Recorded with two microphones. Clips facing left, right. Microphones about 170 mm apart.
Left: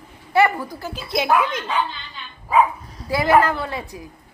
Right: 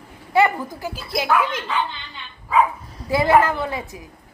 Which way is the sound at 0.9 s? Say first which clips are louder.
Left 4 dB; 5° right (ahead or behind).